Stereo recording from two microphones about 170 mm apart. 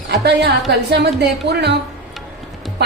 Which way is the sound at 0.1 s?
80° right.